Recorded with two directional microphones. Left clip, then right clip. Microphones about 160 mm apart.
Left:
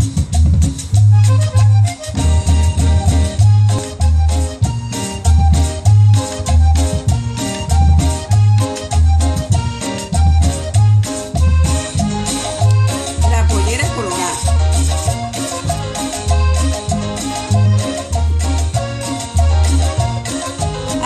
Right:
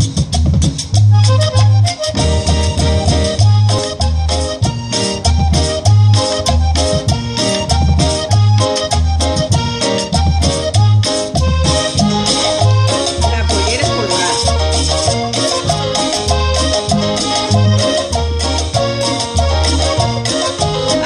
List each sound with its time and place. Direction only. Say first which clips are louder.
2.1 s music: right 6 dB; 30° right (ahead or behind)
4.9 s music: right 7 dB; 30° right (ahead or behind)